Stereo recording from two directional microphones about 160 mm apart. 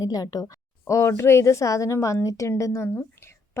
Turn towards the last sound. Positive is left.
turn(degrees=15)  # may be behind; listen again after turning